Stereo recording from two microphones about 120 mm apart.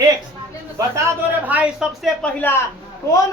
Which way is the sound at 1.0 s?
20° right (ahead or behind).